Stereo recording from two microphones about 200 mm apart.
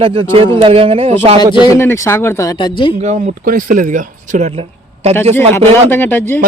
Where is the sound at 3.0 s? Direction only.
40° right (ahead or behind).